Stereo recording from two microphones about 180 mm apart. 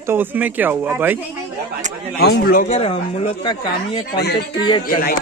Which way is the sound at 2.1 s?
65° left (ahead or behind).